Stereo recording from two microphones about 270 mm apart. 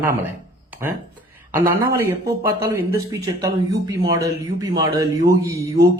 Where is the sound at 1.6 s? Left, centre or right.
Right.